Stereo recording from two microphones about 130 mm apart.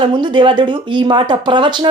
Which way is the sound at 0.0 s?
40° right (ahead or behind).